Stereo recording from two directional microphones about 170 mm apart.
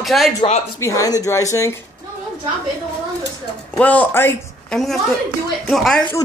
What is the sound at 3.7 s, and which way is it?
A man's voice, 10° left (ahead or behind).